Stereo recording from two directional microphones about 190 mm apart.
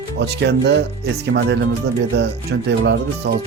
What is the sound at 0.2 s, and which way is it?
Speech, 65° right (ahead or behind).